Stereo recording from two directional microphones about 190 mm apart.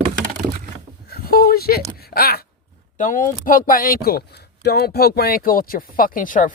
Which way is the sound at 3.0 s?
45° left (ahead or behind).